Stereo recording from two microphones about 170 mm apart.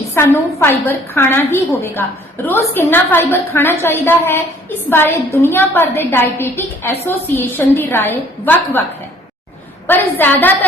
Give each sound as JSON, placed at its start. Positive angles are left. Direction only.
{"t": 0.1, "sound": "a woman's voice", "side_deg": 15}
{"t": 9.8, "sound": "a woman's voice", "side_deg": 10}